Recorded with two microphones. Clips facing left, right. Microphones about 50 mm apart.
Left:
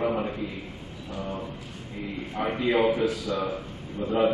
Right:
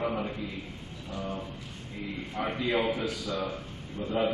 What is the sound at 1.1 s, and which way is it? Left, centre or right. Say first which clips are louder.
A man's voice: left 2 dB; centre.